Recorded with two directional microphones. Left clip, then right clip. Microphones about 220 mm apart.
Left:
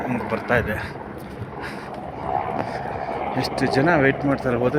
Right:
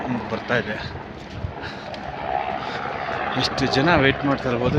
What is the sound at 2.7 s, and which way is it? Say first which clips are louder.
Speech: right 1 dB; 20° right (ahead or behind).